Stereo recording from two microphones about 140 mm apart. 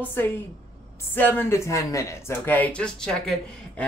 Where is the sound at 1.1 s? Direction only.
15° left (ahead or behind).